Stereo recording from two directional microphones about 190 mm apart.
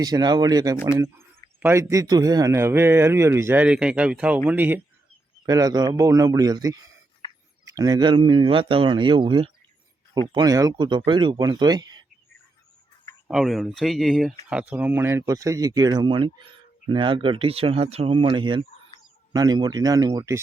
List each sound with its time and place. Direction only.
0.0 s speech: 20° right (ahead or behind)
13.2 s speech: centre (ahead or behind); by 20.4 s 20° right (ahead or behind)